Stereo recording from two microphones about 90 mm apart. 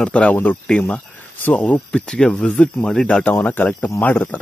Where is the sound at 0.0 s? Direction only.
15° left (ahead or behind).